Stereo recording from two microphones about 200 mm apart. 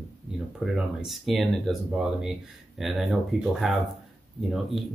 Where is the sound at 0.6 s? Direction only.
Centre (ahead or behind).